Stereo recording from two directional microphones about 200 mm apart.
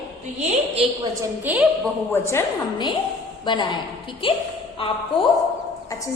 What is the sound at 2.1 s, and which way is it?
A woman's voice, 15° left (ahead or behind).